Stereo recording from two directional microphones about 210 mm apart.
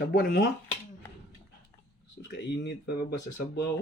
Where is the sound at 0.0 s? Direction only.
45° left (ahead or behind).